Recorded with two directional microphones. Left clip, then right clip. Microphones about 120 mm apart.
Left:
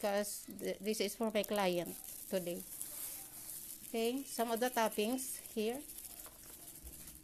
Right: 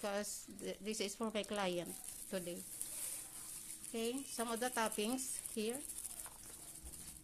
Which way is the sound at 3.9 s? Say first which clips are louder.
Left 5 dB; 40° left (ahead or behind).